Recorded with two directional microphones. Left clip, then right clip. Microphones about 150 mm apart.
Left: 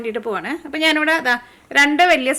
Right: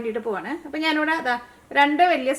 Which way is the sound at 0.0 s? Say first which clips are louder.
Left 3 dB; 35° left (ahead or behind).